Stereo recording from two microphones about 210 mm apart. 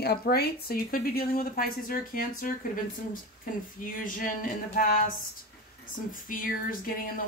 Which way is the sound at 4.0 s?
40° left (ahead or behind).